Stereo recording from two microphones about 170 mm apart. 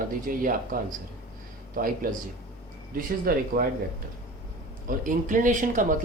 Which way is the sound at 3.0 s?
60° right (ahead or behind).